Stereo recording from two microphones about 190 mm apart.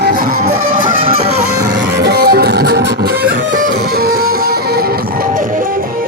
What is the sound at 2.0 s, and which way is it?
Music, 55° right (ahead or behind).